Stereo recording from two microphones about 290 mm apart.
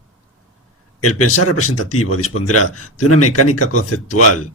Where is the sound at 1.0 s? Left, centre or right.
Left.